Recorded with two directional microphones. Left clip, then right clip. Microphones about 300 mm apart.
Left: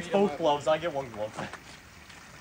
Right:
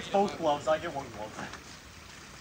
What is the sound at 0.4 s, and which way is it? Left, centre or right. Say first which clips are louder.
Speech: left 2 dB; centre.